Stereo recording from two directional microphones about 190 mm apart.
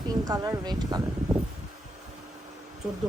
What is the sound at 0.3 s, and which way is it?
Speech, 20° right (ahead or behind).